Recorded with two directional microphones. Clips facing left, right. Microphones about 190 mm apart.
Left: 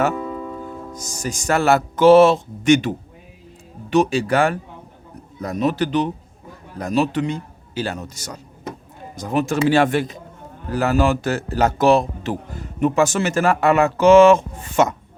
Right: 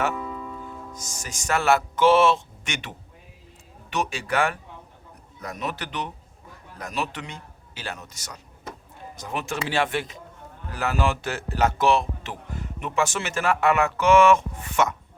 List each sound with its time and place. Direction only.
0.9 s a man's voice: 35° left (ahead or behind)